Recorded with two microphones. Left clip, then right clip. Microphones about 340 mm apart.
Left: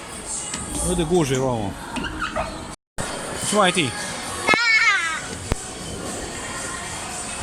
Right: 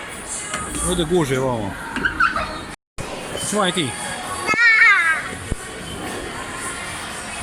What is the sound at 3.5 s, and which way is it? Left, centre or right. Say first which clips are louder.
Speech: left 2 dB; centre.